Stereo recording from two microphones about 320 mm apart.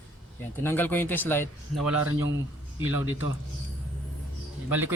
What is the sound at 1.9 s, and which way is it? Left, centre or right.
Speech, right.